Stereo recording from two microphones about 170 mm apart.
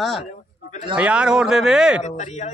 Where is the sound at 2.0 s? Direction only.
45° left (ahead or behind).